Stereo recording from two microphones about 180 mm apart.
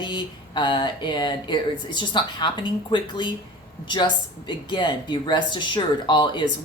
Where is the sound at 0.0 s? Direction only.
25° left (ahead or behind).